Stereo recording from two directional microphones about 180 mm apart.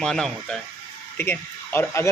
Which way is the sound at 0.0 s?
5° left (ahead or behind).